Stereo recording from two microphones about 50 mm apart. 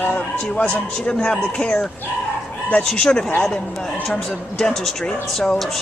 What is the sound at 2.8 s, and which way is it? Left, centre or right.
Speech, centre.